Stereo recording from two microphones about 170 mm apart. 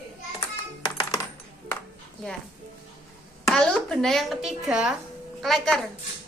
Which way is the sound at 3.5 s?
5° left (ahead or behind).